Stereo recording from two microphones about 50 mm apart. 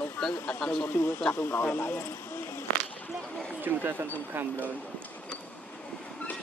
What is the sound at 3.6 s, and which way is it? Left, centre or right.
Speech, right.